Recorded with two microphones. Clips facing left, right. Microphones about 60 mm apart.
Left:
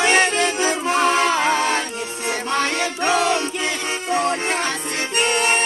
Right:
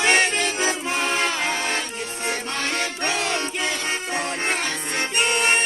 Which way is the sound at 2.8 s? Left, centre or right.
Centre.